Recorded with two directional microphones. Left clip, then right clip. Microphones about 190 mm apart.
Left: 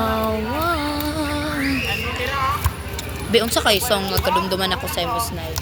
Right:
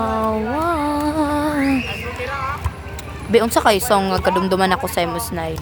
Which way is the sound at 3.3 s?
25° right (ahead or behind).